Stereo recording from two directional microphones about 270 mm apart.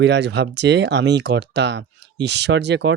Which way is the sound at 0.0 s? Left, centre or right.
Right.